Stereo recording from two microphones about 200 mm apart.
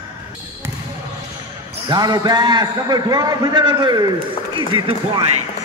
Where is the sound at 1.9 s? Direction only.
20° right (ahead or behind).